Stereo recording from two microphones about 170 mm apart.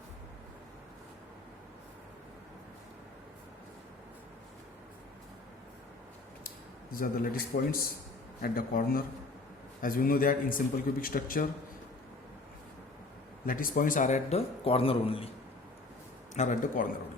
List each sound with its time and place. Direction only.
6.9 s a man's voice: 55° left (ahead or behind)
13.4 s a man's voice: 55° left (ahead or behind); by 15.3 s 35° left (ahead or behind)
16.3 s a man's voice: 45° left (ahead or behind)